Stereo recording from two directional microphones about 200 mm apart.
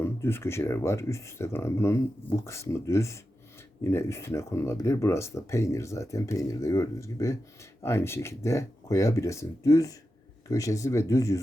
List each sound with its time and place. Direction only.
0.0 s speech: 10° left (ahead or behind)